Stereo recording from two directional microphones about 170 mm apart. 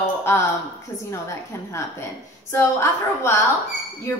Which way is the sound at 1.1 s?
15° left (ahead or behind).